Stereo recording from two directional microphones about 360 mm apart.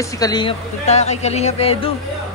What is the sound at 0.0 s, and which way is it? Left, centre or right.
Speech, centre.